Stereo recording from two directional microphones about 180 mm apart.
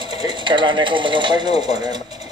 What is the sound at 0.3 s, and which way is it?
Speech, 25° right (ahead or behind).